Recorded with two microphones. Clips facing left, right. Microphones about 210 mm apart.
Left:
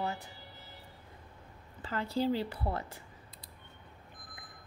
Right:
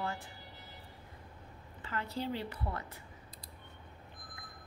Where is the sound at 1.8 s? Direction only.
35° left (ahead or behind).